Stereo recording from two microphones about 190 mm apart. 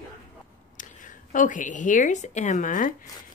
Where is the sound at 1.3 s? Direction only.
40° left (ahead or behind).